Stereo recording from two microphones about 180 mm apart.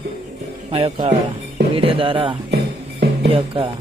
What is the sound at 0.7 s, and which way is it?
Speech, 30° right (ahead or behind).